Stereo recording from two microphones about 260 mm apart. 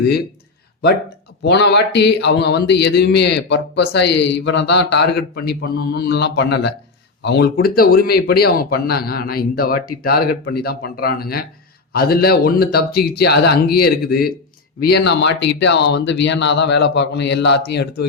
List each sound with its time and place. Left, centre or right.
1.5 s speech: left